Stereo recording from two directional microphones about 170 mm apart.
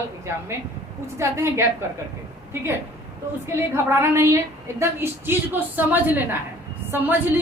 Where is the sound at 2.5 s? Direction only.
15° right (ahead or behind).